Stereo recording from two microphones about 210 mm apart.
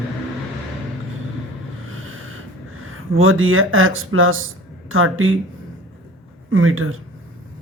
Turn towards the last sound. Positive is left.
turn(degrees=-75)  # may be behind; listen again after turning